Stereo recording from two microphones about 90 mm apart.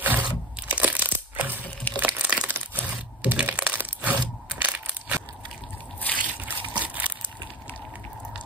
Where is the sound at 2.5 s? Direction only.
20° right (ahead or behind).